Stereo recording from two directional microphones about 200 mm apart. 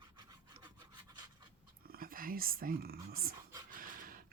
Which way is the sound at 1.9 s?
45° right (ahead or behind).